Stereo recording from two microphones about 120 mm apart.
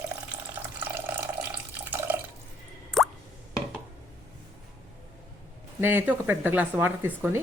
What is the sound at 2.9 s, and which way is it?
Plop, centre (ahead or behind).